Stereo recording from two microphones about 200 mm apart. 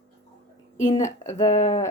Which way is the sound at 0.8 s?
35° left (ahead or behind).